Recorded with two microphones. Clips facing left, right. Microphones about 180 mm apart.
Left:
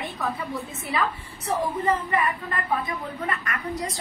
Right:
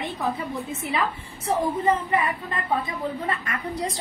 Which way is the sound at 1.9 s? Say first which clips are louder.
Even; 25° right (ahead or behind).